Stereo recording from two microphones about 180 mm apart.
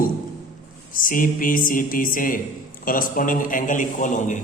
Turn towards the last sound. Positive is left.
turn(degrees=45)  # may be behind; listen again after turning